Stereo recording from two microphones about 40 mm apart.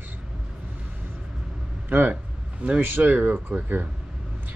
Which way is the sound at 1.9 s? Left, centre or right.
Right.